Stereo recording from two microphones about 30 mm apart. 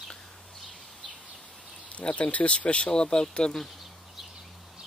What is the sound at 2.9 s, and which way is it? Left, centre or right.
Speech, left.